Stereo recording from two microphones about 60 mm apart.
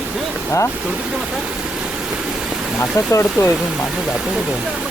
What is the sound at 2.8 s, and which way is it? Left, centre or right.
Speech, left.